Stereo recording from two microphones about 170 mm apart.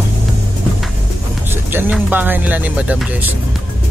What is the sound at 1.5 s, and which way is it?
Speech, 10° right (ahead or behind).